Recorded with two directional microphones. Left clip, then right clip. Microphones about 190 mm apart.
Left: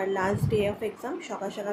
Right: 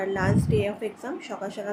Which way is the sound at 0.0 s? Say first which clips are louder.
Right 1 dB; 15° right (ahead or behind).